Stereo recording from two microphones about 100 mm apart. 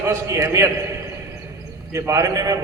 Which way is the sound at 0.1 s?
30° right (ahead or behind).